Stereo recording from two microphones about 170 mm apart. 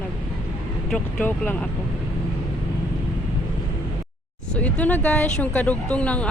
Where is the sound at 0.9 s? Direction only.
10° left (ahead or behind).